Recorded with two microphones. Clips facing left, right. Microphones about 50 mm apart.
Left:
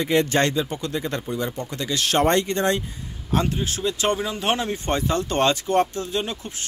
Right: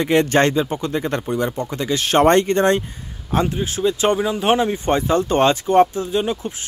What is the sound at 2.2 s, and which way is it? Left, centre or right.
Speech, right.